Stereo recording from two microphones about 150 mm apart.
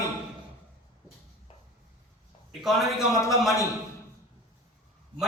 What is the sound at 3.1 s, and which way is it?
Speech, 20° left (ahead or behind).